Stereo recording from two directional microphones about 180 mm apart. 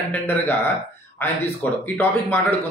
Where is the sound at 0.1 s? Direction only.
10° left (ahead or behind).